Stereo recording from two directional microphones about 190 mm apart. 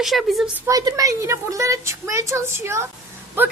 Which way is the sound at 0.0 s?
Centre (ahead or behind).